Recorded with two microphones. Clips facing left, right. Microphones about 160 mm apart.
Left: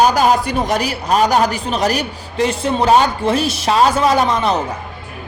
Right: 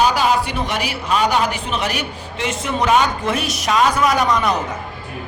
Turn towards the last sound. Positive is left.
turn(degrees=30)  # may be behind; listen again after turning